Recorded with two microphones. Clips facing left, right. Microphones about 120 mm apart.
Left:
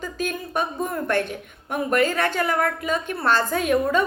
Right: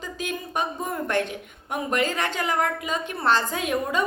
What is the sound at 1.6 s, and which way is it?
A woman's voice, 15° right (ahead or behind).